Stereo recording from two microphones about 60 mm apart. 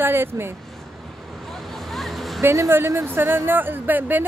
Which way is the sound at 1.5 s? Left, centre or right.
Centre.